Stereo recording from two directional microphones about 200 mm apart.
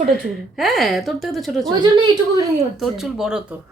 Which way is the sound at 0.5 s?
Centre (ahead or behind).